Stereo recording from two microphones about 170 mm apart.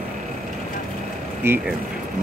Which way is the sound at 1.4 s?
15° right (ahead or behind).